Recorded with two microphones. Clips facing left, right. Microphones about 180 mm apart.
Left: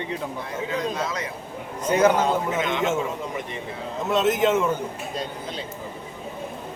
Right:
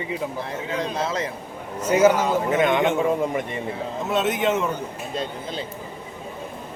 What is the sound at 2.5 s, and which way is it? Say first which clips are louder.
Speech: right 6 dB; 60° right (ahead or behind).